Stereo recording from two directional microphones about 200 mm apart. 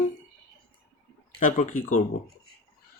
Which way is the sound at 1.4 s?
40° left (ahead or behind).